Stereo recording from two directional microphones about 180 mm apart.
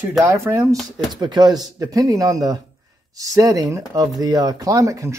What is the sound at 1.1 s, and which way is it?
Speech, 25° right (ahead or behind).